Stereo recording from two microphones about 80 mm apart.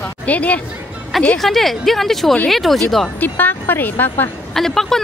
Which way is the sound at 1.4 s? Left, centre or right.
Centre.